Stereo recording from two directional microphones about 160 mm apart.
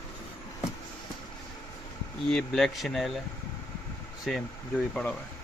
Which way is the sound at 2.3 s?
5° left (ahead or behind).